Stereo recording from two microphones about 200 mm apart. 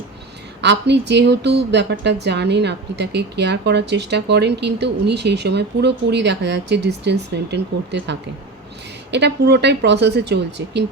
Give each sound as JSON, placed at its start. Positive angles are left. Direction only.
{"t": 0.6, "sound": "a woman's voice", "side_deg": -60}
{"t": 9.1, "sound": "a woman's voice", "side_deg": -60}